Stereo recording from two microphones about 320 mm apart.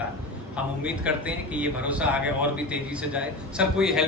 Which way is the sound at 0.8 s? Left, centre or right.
Centre.